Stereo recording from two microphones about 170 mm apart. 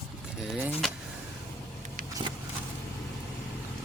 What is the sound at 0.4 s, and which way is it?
Vehicle, centre (ahead or behind).